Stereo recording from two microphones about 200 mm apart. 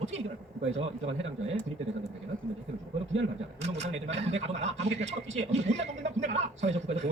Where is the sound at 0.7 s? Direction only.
30° right (ahead or behind).